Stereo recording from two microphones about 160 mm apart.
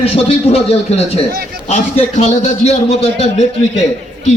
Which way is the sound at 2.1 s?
45° left (ahead or behind).